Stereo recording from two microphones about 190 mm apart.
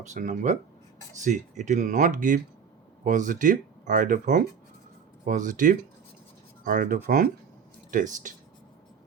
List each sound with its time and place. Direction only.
0.0 s speech: 40° right (ahead or behind)